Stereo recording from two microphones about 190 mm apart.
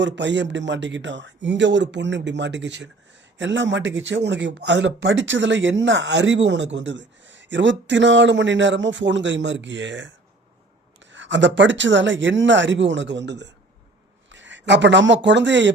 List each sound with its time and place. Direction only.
0.0 s speech: 70° right (ahead or behind)